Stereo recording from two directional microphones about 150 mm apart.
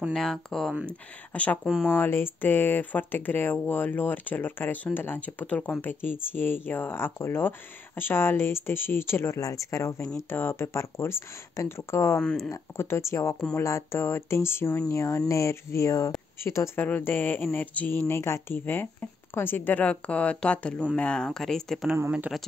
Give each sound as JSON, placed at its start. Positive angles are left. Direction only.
{"t": 0.1, "sound": "speech", "side_deg": 5}
{"t": 12.2, "sound": "speech", "side_deg": 5}
{"t": 12.4, "sound": "speech", "side_deg": 20}
{"t": 21.9, "sound": "speech", "side_deg": -15}